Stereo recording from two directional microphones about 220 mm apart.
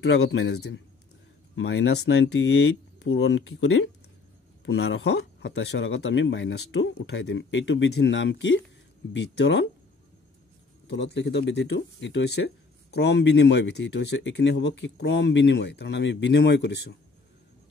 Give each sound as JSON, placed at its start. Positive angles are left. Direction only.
{"t": 0.0, "sound": "speech", "side_deg": 55}
{"t": 10.9, "sound": "speech", "side_deg": 50}